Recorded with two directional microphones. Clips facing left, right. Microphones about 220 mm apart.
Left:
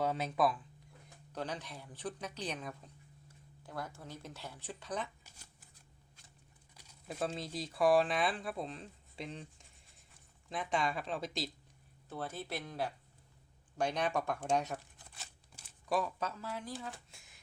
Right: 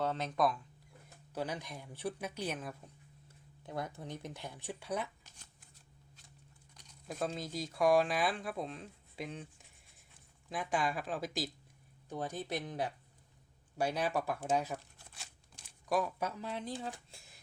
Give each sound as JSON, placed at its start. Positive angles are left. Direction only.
{"t": 0.0, "sound": "speech", "side_deg": 10}
{"t": 1.3, "sound": "speech", "side_deg": -10}
{"t": 3.6, "sound": "speech", "side_deg": -20}
{"t": 6.7, "sound": "speech", "side_deg": 5}
{"t": 12.0, "sound": "speech", "side_deg": -15}
{"t": 13.7, "sound": "speech", "side_deg": -5}
{"t": 15.2, "sound": "a sound", "side_deg": 0}
{"t": 16.2, "sound": "speech", "side_deg": -15}